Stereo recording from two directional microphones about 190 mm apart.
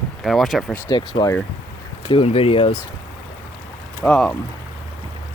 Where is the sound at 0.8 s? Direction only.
20° left (ahead or behind).